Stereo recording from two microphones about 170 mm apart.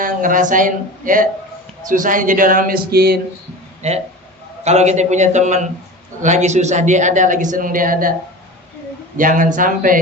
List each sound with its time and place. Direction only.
0.0 s speech: 50° right (ahead or behind); by 3.2 s 65° right (ahead or behind)
3.8 s speech: 40° right (ahead or behind)
9.1 s speech: 50° right (ahead or behind)